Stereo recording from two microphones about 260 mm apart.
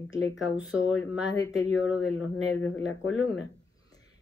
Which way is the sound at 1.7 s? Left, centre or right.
Left.